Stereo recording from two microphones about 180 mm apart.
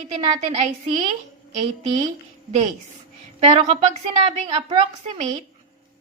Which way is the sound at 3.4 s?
35° right (ahead or behind).